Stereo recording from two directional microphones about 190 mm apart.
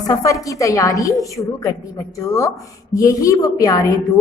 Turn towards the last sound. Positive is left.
turn(degrees=15)  # may be behind; listen again after turning